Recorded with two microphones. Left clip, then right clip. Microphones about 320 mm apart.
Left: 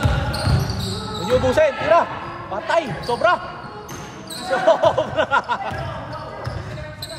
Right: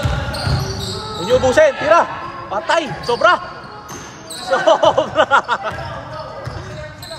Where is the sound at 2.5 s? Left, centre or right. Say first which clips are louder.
Right 3 dB; right.